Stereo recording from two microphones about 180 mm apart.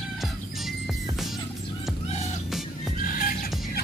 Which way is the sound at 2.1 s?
35° left (ahead or behind).